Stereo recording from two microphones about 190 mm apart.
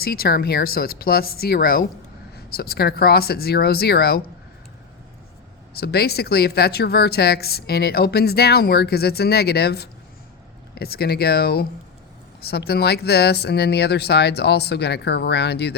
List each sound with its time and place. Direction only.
0.0 s a woman's voice: 55° left (ahead or behind)
5.7 s a woman's voice: 55° left (ahead or behind)